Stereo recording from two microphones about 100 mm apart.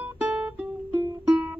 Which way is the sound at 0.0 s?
15° right (ahead or behind).